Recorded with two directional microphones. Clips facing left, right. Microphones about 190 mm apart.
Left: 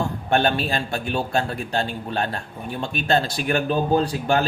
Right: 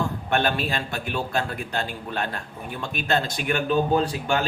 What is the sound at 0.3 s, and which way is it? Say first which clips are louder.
A man's voice: left 4 dB; 30° left (ahead or behind).